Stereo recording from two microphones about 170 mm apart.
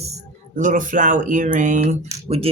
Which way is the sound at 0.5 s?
50° right (ahead or behind).